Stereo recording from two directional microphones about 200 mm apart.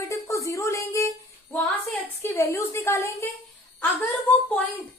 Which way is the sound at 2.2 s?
15° left (ahead or behind).